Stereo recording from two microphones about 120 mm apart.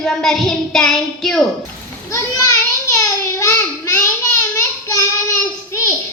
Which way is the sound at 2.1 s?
25° left (ahead or behind).